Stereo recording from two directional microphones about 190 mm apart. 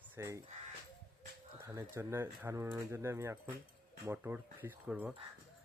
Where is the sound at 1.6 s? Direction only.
15° right (ahead or behind).